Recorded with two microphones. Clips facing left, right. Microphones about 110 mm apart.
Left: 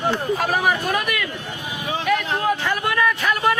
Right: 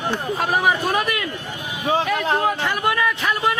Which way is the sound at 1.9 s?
30° right (ahead or behind).